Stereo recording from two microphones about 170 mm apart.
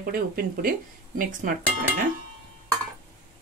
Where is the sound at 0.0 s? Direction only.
60° right (ahead or behind).